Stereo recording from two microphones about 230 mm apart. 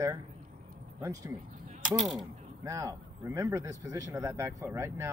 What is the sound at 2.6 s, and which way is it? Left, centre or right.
Speech, centre.